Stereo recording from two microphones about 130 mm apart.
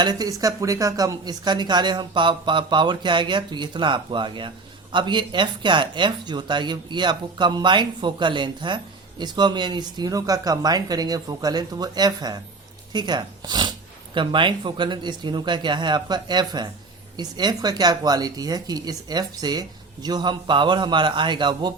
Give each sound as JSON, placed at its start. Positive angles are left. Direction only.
{"t": 0.0, "sound": "speech", "side_deg": -30}